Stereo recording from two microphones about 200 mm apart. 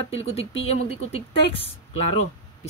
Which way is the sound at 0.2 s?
30° left (ahead or behind).